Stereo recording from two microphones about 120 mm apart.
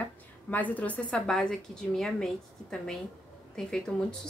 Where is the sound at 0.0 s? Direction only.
15° left (ahead or behind).